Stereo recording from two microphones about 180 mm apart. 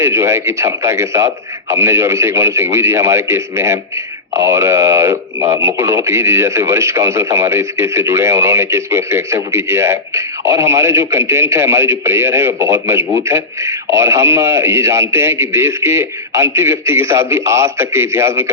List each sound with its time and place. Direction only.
0.0 s speech: 15° right (ahead or behind)